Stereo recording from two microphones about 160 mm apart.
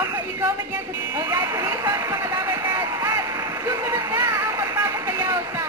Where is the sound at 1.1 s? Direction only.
25° right (ahead or behind).